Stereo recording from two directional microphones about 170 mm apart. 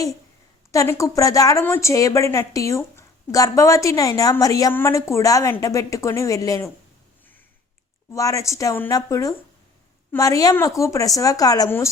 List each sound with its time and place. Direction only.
0.7 s a woman's voice: 20° left (ahead or behind)
8.1 s a woman's voice: 20° left (ahead or behind)